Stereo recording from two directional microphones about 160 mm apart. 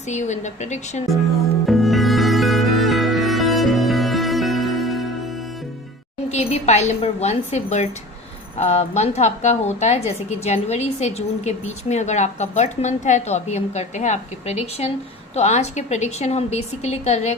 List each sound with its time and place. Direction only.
0.1 s a woman's voice: 50° left (ahead or behind)
1.1 s music: centre (ahead or behind)
6.2 s a woman's voice: 45° left (ahead or behind)